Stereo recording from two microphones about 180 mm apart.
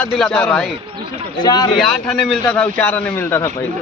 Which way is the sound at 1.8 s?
5° left (ahead or behind).